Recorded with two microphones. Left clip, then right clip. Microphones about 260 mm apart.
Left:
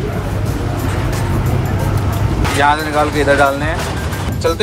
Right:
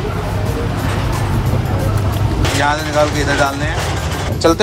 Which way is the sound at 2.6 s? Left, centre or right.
Centre.